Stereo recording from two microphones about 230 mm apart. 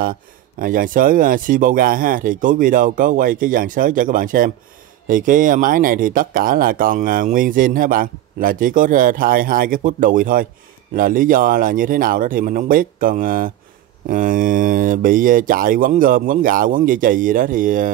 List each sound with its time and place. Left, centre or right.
0.0 s speech: right